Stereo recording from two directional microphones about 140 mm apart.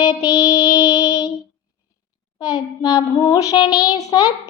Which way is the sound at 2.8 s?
30° left (ahead or behind).